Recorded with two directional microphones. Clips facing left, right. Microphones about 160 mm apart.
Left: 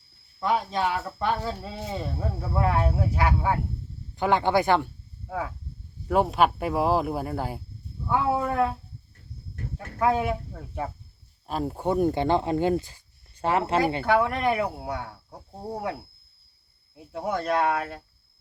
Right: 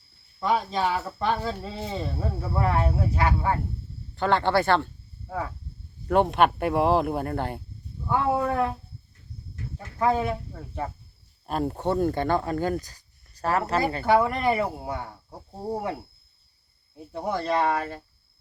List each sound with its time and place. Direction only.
0.3 s speech: centre (ahead or behind)
5.3 s speech: 5° left (ahead or behind)
9.7 s speech: 5° left (ahead or behind)
11.9 s speech: 15° left (ahead or behind)
14.0 s speech: 5° right (ahead or behind)